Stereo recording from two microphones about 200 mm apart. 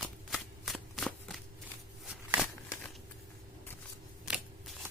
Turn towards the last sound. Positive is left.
turn(degrees=-5)  # may be behind; listen again after turning